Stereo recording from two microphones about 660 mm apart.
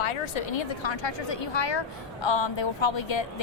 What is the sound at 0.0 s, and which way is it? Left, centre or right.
Speech, left.